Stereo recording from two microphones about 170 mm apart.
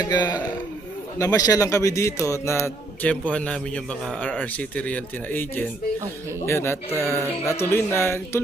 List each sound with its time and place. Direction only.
0.0 s a man's voice: 25° left (ahead or behind)